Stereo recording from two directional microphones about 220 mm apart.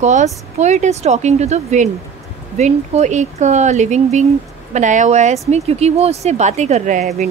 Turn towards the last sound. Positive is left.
turn(degrees=-30)  # may be behind; listen again after turning